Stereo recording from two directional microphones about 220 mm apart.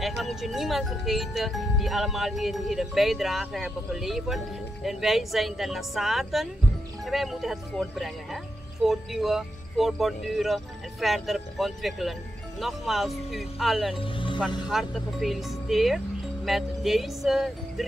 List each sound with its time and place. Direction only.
0.0 s speech: centre (ahead or behind)
13.9 s music: 25° left (ahead or behind)
14.7 s speech: centre (ahead or behind)